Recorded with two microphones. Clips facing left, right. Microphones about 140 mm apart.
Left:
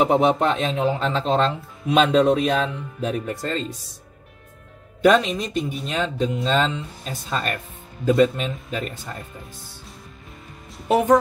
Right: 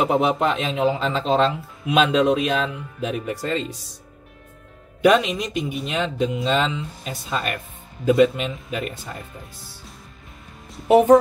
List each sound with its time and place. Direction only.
0.0 s speech: 5° right (ahead or behind)
5.0 s speech: 5° right (ahead or behind)
10.9 s speech: 25° right (ahead or behind)